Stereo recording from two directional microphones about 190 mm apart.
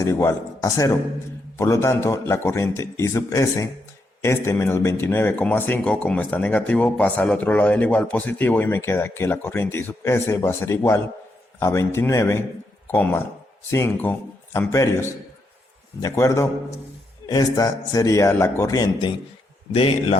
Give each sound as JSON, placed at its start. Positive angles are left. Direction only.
{"t": 0.0, "sound": "a man's voice", "side_deg": 15}
{"t": 19.7, "sound": "a man's voice", "side_deg": 30}